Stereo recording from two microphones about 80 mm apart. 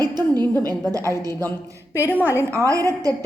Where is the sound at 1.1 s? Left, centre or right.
Right.